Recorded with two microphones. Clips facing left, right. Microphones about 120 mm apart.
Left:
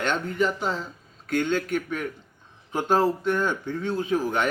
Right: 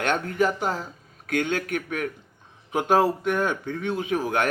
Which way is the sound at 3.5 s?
55° right (ahead or behind).